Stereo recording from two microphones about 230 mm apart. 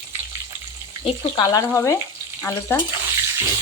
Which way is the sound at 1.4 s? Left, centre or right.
Centre.